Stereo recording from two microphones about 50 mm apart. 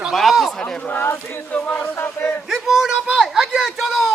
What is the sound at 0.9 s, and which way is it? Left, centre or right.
Speech, left.